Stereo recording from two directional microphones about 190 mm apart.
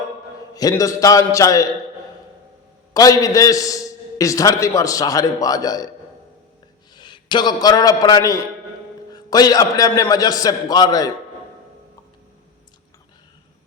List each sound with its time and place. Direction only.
0.5 s a man's voice: 20° left (ahead or behind)
2.9 s a man's voice: 20° left (ahead or behind)
6.9 s a man's voice: 25° left (ahead or behind)